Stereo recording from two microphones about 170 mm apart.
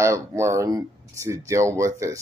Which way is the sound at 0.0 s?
15° right (ahead or behind).